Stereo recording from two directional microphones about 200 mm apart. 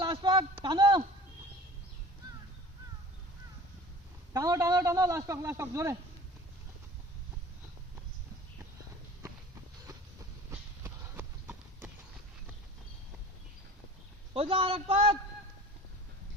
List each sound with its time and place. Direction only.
0.0 s a sound: 25° right (ahead or behind)
4.4 s a man's voice: 15° right (ahead or behind)
10.5 s clip-clop: 10° right (ahead or behind)
14.3 s a man's voice: 30° right (ahead or behind)